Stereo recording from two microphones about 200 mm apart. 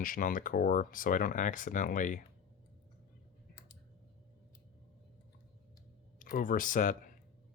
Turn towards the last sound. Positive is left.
turn(degrees=40)  # may be behind; listen again after turning